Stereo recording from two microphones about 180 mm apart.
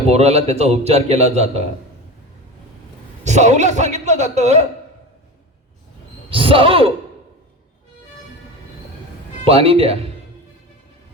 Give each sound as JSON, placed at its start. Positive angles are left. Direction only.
{"t": 0.1, "sound": "a man's voice", "side_deg": -35}
{"t": 3.2, "sound": "a man's voice", "side_deg": -40}
{"t": 6.3, "sound": "a man's voice", "side_deg": -30}
{"t": 9.4, "sound": "a man's voice", "side_deg": -30}